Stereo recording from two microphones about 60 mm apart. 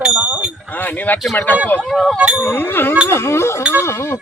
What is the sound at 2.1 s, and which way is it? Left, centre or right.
Speech, centre.